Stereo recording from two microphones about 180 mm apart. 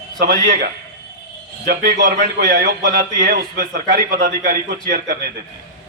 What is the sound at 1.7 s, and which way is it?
A man's voice, 55° right (ahead or behind).